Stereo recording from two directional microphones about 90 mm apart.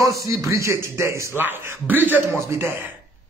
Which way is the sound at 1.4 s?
20° right (ahead or behind).